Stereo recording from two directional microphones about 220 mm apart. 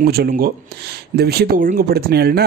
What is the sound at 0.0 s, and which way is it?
Speech, 45° right (ahead or behind).